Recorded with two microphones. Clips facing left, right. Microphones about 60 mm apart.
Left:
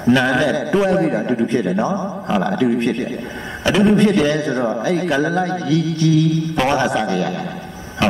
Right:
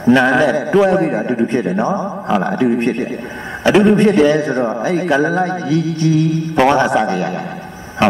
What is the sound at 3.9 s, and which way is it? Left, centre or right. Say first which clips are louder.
Mantra: right 3 dB; right.